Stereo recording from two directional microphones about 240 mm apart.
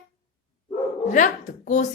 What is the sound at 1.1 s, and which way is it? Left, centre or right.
Speech, left.